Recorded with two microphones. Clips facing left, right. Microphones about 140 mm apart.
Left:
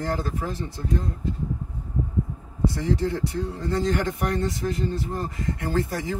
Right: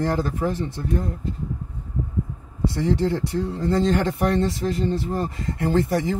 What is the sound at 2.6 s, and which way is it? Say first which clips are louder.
Speech: right 3 dB; 25° right (ahead or behind).